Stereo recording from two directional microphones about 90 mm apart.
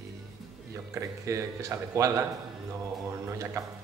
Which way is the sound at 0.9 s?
35° right (ahead or behind).